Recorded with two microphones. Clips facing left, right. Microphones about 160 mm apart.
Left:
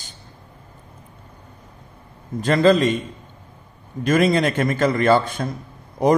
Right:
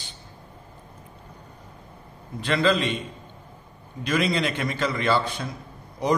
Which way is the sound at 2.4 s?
45° left (ahead or behind).